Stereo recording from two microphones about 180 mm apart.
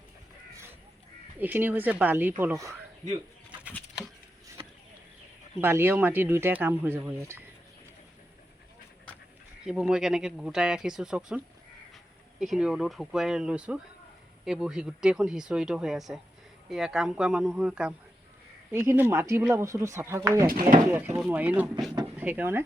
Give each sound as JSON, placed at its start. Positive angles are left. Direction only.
{"t": 1.4, "sound": "speech", "side_deg": -10}
{"t": 5.5, "sound": "speech", "side_deg": -10}
{"t": 9.6, "sound": "speech", "side_deg": -5}
{"t": 12.4, "sound": "speech", "side_deg": 0}
{"t": 20.5, "sound": "speech", "side_deg": -50}
{"t": 20.8, "sound": "speech", "side_deg": -10}